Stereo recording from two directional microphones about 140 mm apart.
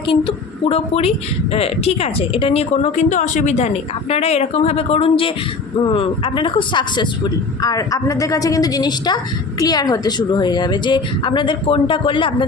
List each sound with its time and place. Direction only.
0.1 s a woman's voice: 40° left (ahead or behind)